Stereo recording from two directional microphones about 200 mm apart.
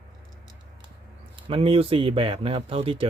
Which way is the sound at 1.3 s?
25° right (ahead or behind).